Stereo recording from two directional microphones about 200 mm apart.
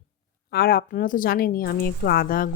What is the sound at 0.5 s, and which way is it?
Speech, 50° left (ahead or behind).